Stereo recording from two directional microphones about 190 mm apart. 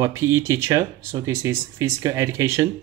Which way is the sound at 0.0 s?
15° right (ahead or behind).